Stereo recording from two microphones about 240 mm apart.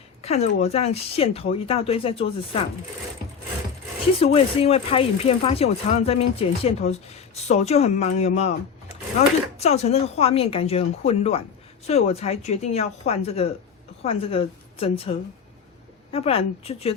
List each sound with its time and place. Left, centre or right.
0.2 s speech: left
4.2 s speech: left
9.6 s a woman's voice: left
16.1 s speech: left